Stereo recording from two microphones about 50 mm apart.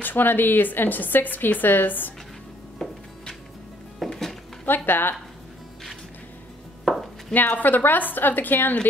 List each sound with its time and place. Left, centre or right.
0.0 s a woman's voice: left
2.8 s music: centre
4.1 s music: centre
4.6 s speech: left
6.8 s chopping: centre
7.3 s a woman's voice: left